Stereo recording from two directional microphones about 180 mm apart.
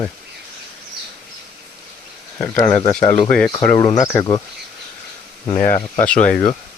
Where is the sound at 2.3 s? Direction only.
15° left (ahead or behind).